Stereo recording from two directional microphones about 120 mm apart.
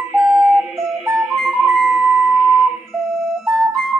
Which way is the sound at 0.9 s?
Centre (ahead or behind).